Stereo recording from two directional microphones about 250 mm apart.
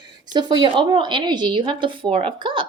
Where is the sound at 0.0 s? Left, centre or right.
Centre.